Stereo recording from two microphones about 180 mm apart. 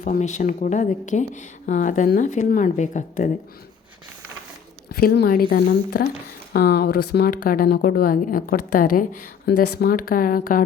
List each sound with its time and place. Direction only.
0.0 s speech: 40° left (ahead or behind)
4.9 s speech: 60° left (ahead or behind)